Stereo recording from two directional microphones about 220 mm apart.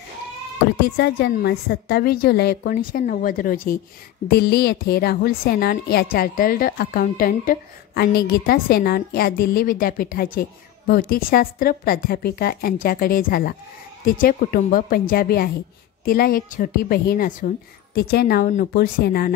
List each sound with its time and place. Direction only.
0.9 s a woman's voice: 45° left (ahead or behind)